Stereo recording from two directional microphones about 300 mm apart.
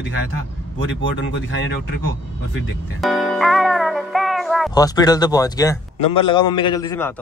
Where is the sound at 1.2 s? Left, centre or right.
Left.